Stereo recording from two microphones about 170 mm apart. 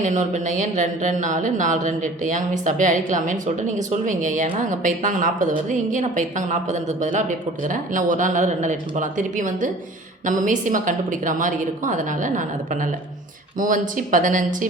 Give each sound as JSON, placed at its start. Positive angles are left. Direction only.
{"t": 0.0, "sound": "speech", "side_deg": -45}